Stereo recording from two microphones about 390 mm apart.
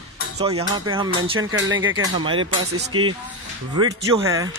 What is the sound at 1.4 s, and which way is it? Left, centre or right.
Speech, right.